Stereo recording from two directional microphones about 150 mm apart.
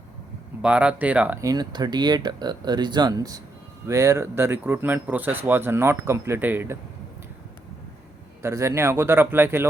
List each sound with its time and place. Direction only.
0.6 s speech: 10° right (ahead or behind)
1.5 s speech: 25° right (ahead or behind)
8.4 s speech: 20° right (ahead or behind)